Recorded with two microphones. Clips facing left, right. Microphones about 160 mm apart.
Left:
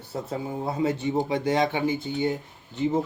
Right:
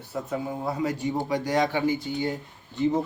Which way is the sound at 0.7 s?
25° left (ahead or behind).